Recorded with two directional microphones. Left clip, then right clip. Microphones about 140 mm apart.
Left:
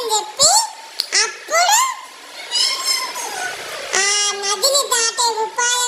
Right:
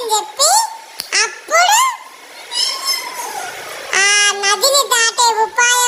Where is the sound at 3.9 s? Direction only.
5° right (ahead or behind).